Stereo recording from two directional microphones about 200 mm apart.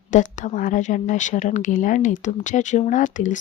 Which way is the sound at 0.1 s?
40° left (ahead or behind).